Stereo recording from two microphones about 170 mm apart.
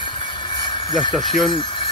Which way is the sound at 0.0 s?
30° left (ahead or behind).